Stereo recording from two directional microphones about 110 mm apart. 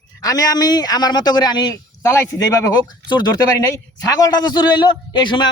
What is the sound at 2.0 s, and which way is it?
A man's voice, 25° left (ahead or behind).